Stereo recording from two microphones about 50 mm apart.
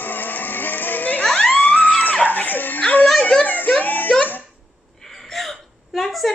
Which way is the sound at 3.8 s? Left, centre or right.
Left.